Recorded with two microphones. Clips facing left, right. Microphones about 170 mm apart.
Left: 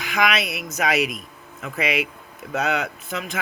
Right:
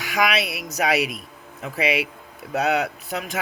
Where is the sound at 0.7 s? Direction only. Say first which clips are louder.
Even; 35° right (ahead or behind).